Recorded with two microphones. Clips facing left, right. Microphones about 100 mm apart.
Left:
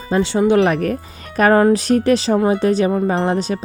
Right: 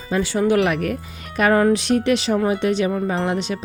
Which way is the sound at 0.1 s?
25° left (ahead or behind).